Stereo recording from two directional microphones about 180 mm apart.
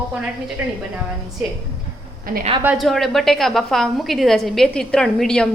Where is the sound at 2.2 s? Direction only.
55° right (ahead or behind).